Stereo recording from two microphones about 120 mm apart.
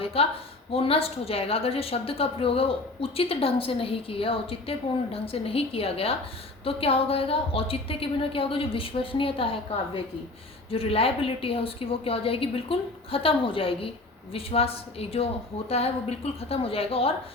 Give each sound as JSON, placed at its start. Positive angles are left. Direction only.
{"t": 0.0, "sound": "a woman's voice", "side_deg": 50}